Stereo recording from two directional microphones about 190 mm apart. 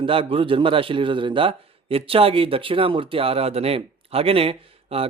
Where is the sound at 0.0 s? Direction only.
30° right (ahead or behind).